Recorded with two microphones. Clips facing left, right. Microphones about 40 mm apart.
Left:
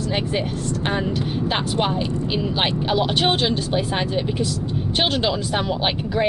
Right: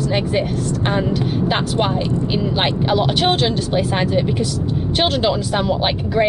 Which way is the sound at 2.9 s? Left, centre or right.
Centre.